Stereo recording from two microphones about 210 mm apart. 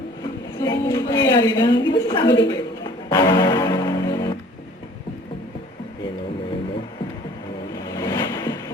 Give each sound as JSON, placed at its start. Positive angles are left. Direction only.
{"t": 0.6, "sound": "a sound", "side_deg": 15}
{"t": 1.9, "sound": "a woman's voice", "side_deg": 20}
{"t": 2.2, "sound": "a man's voice", "side_deg": 55}
{"t": 2.5, "sound": "music", "side_deg": 20}
{"t": 7.9, "sound": "ocean", "side_deg": 15}